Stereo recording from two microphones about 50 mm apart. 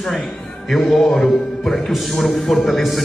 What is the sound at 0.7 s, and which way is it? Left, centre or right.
A man's voice, centre.